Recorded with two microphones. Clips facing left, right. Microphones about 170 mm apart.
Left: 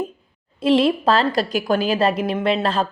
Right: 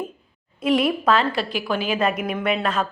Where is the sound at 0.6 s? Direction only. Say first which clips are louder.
Left 3 dB; 30° left (ahead or behind).